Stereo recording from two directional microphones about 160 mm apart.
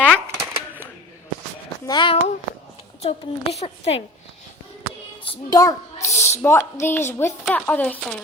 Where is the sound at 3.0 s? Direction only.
40° left (ahead or behind).